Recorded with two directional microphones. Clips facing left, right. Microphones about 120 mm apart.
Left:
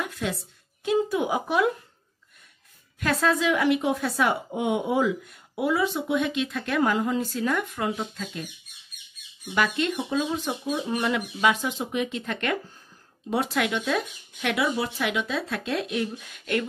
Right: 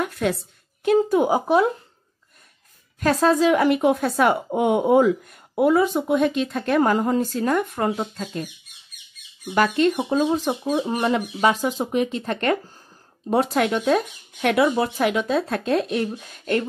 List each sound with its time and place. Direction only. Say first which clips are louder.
0.0 s a sound: right 7 dB; 55° right (ahead or behind)
0.8 s speech: right 6 dB; 45° right (ahead or behind)
3.0 s speech: right 6 dB; 35° right (ahead or behind)
9.5 s speech: right 6 dB; 40° right (ahead or behind)